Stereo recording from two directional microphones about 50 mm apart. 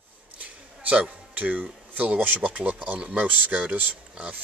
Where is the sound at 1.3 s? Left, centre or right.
Right.